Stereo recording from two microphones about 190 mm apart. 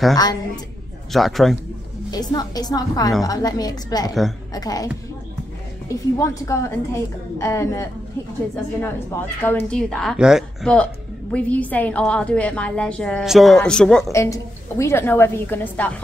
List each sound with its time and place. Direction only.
0.1 s a woman's voice: 20° left (ahead or behind)
1.1 s a woman's voice: centre (ahead or behind)
2.0 s a woman's voice: 20° left (ahead or behind)
6.1 s a woman's voice: 15° left (ahead or behind)
14.1 s a woman's voice: 15° left (ahead or behind)